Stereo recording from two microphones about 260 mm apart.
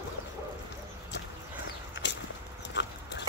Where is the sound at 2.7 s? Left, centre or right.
Left.